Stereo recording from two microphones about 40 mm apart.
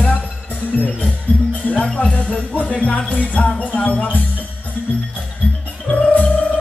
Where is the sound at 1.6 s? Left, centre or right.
Left.